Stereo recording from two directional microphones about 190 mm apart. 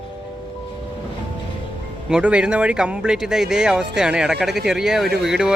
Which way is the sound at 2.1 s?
5° right (ahead or behind).